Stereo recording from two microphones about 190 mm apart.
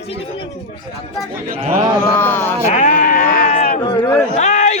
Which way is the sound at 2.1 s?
10° left (ahead or behind).